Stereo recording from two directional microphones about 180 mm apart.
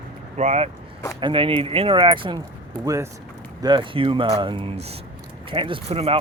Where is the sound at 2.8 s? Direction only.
20° right (ahead or behind).